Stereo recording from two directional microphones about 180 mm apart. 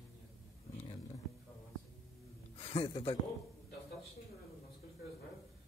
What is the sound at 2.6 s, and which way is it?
Speech, 30° left (ahead or behind).